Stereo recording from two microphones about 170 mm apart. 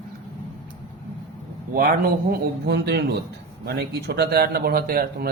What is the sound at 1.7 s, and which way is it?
Speech, 60° right (ahead or behind).